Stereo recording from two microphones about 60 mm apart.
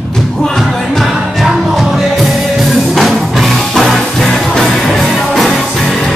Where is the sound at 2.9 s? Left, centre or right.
Centre.